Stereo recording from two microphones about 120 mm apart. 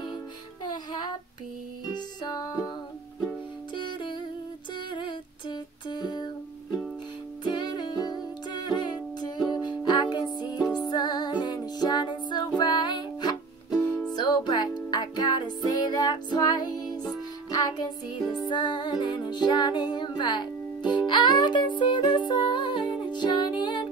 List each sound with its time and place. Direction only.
0.7 s music: 35° left (ahead or behind)
3.7 s music: 40° left (ahead or behind)
13.7 s music: 10° left (ahead or behind)
14.1 s music: 35° left (ahead or behind)